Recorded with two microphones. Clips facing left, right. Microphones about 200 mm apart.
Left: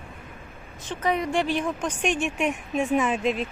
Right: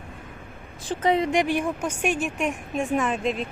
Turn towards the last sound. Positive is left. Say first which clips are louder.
# left 1 dB
turn(degrees=0)  # may be behind; listen again after turning